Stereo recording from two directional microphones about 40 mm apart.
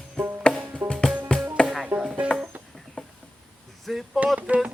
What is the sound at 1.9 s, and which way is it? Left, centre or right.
Music, right.